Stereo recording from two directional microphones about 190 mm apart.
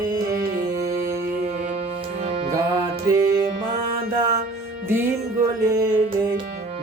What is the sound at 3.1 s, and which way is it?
Music, 20° right (ahead or behind).